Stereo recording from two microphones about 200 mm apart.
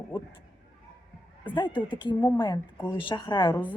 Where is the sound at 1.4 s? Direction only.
25° left (ahead or behind).